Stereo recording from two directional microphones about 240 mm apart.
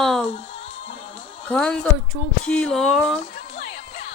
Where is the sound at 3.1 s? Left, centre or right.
Left.